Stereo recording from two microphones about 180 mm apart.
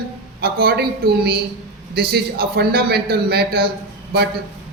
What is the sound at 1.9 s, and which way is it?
A man's voice, 60° right (ahead or behind).